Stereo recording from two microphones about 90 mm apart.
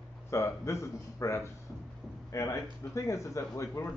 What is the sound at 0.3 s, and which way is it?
Speech, 30° left (ahead or behind).